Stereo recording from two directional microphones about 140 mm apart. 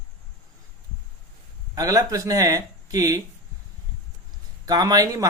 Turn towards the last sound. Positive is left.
turn(degrees=-25)  # may be behind; listen again after turning